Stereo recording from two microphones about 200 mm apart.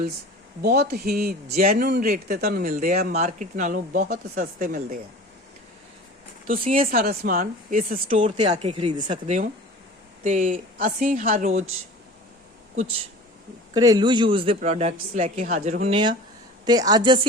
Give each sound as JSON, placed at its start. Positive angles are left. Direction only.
{"t": 0.6, "sound": "speech", "side_deg": -55}
{"t": 3.1, "sound": "speech", "side_deg": -35}
{"t": 6.5, "sound": "speech", "side_deg": -45}
{"t": 8.1, "sound": "speech", "side_deg": -30}
{"t": 9.0, "sound": "speech", "side_deg": -35}
{"t": 13.7, "sound": "speech", "side_deg": -20}